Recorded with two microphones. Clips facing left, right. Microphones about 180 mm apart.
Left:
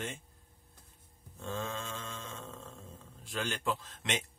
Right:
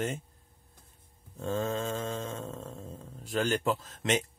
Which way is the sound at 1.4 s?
40° right (ahead or behind).